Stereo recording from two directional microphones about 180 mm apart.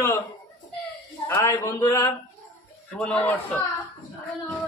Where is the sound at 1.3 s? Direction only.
15° left (ahead or behind).